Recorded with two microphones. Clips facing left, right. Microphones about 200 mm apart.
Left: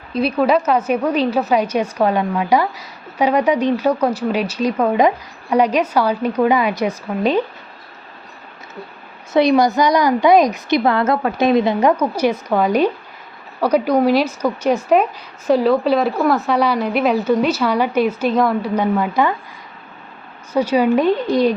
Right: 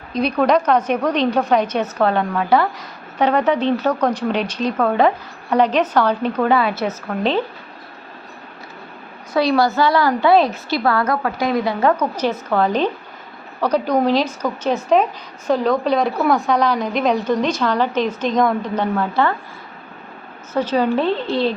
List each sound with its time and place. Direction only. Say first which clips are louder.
0.1 s a woman's voice: left 1 dB; 5° left (ahead or behind)
9.3 s a woman's voice: left 3 dB; 20° left (ahead or behind)
20.5 s a woman's voice: left 3 dB; 10° left (ahead or behind)